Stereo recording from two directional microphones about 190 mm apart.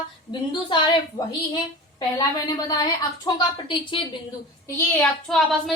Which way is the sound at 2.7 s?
20° left (ahead or behind).